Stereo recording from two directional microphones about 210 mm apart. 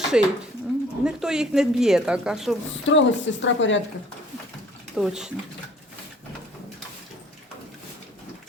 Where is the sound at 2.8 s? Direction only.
60° left (ahead or behind).